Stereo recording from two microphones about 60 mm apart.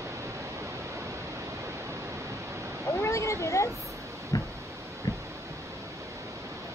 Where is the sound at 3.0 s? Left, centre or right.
Left.